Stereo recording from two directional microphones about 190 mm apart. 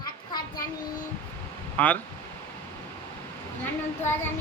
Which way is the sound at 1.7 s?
10° left (ahead or behind).